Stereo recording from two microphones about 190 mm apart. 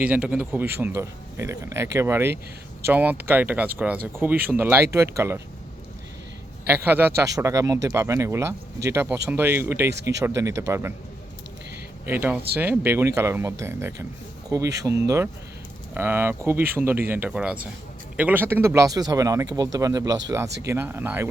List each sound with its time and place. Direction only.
0.0 s speech: 5° right (ahead or behind)
6.7 s speech: 10° right (ahead or behind)
9.9 s speech: 65° right (ahead or behind)
10.2 s speech: 15° right (ahead or behind)
12.0 s speech: 10° right (ahead or behind)